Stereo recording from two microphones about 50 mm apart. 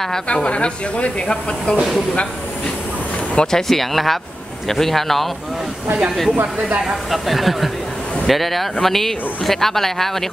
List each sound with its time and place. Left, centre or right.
0.3 s speech: left
3.3 s speech: centre
7.1 s speech: centre